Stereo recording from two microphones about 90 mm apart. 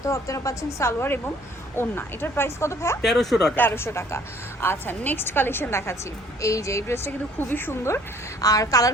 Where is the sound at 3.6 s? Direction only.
25° left (ahead or behind).